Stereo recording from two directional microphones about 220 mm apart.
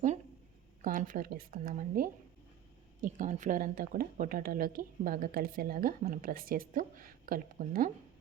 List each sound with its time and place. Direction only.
0.8 s speech: 35° right (ahead or behind)